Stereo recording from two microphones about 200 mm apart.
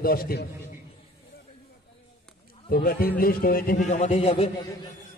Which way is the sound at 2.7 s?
50° left (ahead or behind).